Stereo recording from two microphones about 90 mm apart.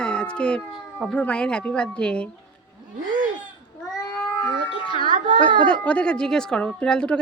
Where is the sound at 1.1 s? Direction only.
10° left (ahead or behind).